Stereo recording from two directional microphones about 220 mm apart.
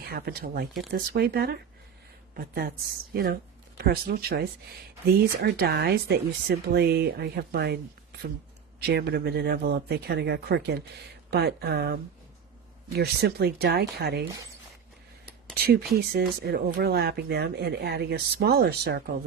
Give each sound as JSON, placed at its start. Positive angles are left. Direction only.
{"t": 0.0, "sound": "speech", "side_deg": -45}
{"t": 8.8, "sound": "speech", "side_deg": -45}
{"t": 13.0, "sound": "speech", "side_deg": -45}
{"t": 15.5, "sound": "speech", "side_deg": -45}